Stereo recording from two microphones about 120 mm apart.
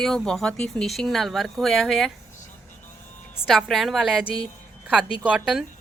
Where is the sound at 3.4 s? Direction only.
Centre (ahead or behind).